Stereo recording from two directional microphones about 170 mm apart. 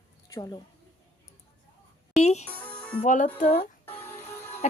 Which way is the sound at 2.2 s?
40° left (ahead or behind).